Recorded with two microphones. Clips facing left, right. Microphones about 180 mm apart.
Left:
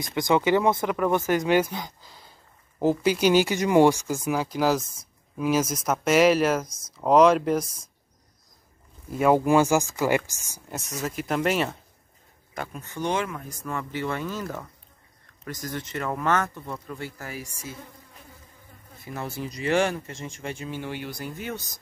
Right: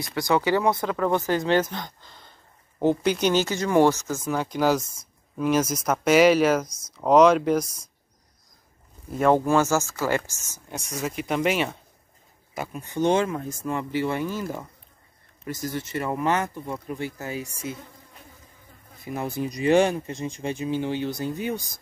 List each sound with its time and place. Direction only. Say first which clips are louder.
0.0 s speech: left 1 dB; 20° left (ahead or behind); by 7.8 s centre (ahead or behind)
9.1 s speech: even; 5° left (ahead or behind)
10.8 s speech: right 1 dB; centre (ahead or behind)
12.9 s speech: right 6 dB; 25° right (ahead or behind)
13.7 s speech: right 3 dB; 15° right (ahead or behind)
19.0 s speech: right 5 dB; 15° right (ahead or behind)